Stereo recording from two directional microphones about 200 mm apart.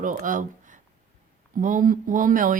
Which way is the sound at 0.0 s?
40° right (ahead or behind).